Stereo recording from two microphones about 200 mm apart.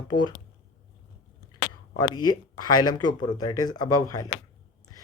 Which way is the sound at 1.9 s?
20° left (ahead or behind).